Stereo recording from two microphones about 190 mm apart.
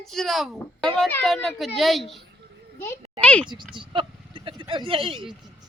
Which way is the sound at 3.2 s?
5° left (ahead or behind).